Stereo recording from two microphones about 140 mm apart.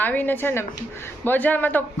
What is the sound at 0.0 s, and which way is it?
A woman's voice, 10° left (ahead or behind).